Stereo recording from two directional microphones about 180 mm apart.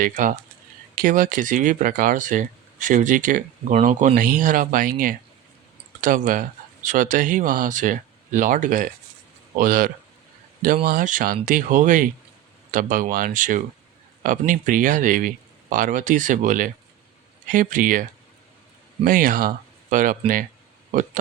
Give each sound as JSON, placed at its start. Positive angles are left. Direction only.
{"t": 0.0, "sound": "speech", "side_deg": -45}
{"t": 19.0, "sound": "speech", "side_deg": -50}